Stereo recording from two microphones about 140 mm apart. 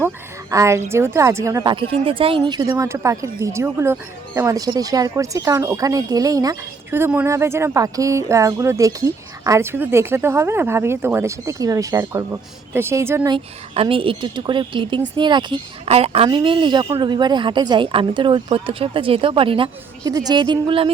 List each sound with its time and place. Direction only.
0.5 s speech: 20° right (ahead or behind)
1.7 s speech: 40° right (ahead or behind)
2.5 s speech: 25° right (ahead or behind)
13.7 s speech: 40° right (ahead or behind)
15.9 s speech: 45° right (ahead or behind)
20.1 s speech: 25° right (ahead or behind)